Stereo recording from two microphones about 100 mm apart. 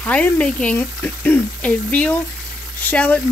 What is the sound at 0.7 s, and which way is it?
Speech, 20° left (ahead or behind).